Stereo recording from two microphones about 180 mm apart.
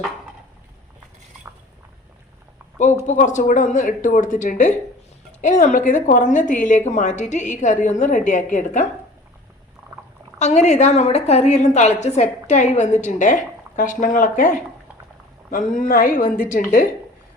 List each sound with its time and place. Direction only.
3.1 s a woman's voice: 45° left (ahead or behind)
10.3 s a woman's voice: 40° left (ahead or behind)